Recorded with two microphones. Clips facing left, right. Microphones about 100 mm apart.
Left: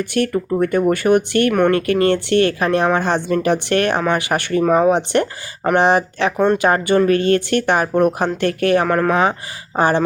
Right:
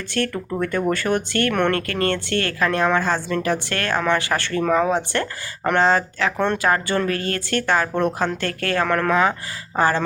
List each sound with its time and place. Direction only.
0.0 s speech: 15° left (ahead or behind)
6.6 s speech: 20° left (ahead or behind)